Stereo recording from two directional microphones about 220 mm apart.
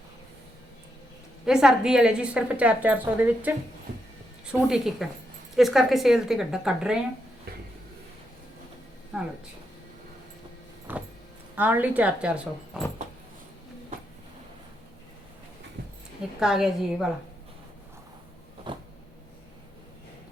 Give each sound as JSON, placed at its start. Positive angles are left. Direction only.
{"t": 1.5, "sound": "a woman's voice", "side_deg": -5}
{"t": 3.9, "sound": "music", "side_deg": -50}
{"t": 4.4, "sound": "a woman's voice", "side_deg": 0}
{"t": 9.1, "sound": "a woman's voice", "side_deg": -5}
{"t": 10.9, "sound": "music", "side_deg": -10}
{"t": 11.5, "sound": "a woman's voice", "side_deg": -10}
{"t": 16.4, "sound": "a woman's voice", "side_deg": 0}
{"t": 18.7, "sound": "a sound", "side_deg": -20}